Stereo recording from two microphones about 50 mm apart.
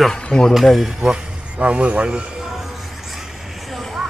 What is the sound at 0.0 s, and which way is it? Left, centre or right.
Speech, centre.